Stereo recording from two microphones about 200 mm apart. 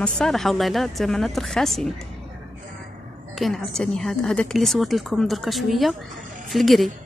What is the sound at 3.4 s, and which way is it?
A woman's voice, centre (ahead or behind).